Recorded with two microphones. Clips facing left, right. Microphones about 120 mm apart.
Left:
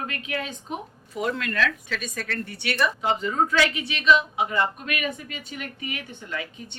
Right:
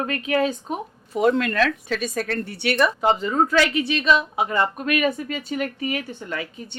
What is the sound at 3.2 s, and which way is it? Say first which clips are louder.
A woman's voice: right 3 dB; 45° right (ahead or behind).